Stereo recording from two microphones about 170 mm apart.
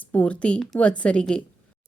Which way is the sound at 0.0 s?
10° left (ahead or behind).